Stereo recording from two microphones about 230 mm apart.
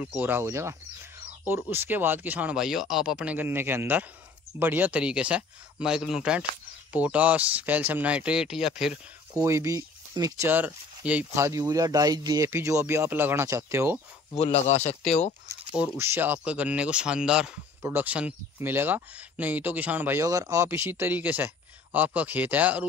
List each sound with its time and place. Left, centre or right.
0.0 s speech: centre
9.3 s speech: centre
14.3 s speech: left
15.7 s speech: centre